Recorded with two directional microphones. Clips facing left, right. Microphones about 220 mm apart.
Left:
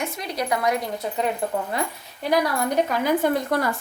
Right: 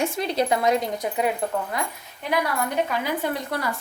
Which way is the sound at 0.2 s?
25° right (ahead or behind).